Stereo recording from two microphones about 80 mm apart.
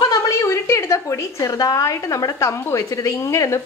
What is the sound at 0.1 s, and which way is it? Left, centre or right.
A woman's voice, left.